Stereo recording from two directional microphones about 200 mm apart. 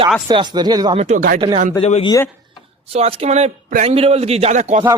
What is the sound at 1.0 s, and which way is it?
Speech, 40° right (ahead or behind).